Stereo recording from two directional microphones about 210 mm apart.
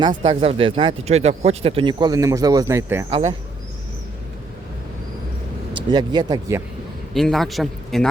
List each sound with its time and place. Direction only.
0.1 s speech: 30° right (ahead or behind); by 3.1 s 15° right (ahead or behind)
3.1 s speech: 35° right (ahead or behind)
5.7 s speech: 20° right (ahead or behind)
7.1 s speech: centre (ahead or behind)